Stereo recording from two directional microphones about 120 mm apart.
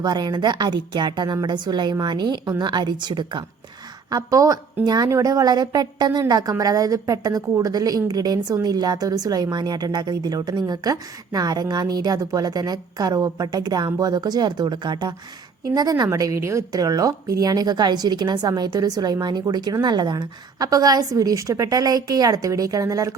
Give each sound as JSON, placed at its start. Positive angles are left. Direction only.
{"t": 0.0, "sound": "a woman's voice", "side_deg": -35}
{"t": 4.1, "sound": "a woman's voice", "side_deg": -30}